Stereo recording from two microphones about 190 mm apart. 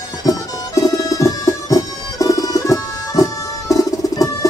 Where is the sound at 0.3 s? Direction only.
20° left (ahead or behind).